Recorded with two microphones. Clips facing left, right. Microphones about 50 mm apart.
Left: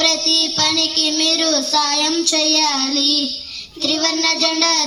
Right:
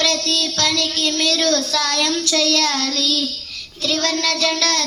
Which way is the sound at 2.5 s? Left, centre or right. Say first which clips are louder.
Left 1 dB; centre.